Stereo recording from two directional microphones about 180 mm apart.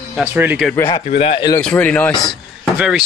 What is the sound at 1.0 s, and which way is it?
Speech, 40° left (ahead or behind).